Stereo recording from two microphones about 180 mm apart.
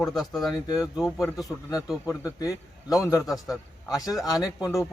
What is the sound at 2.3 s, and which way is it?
Speech, 20° left (ahead or behind).